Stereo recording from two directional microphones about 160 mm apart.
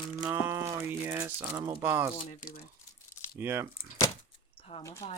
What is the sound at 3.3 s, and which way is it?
Speech, 15° right (ahead or behind).